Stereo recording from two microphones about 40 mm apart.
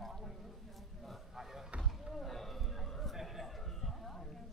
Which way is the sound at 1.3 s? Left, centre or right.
Centre.